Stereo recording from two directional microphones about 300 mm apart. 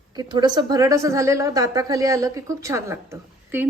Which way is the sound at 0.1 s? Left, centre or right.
Centre.